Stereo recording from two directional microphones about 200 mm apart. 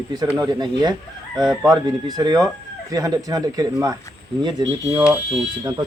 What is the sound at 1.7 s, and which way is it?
Speech, 20° right (ahead or behind).